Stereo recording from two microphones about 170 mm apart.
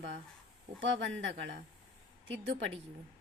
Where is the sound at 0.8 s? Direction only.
90° right.